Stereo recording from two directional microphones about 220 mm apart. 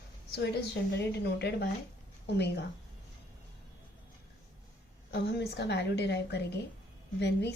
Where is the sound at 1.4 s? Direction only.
50° left (ahead or behind).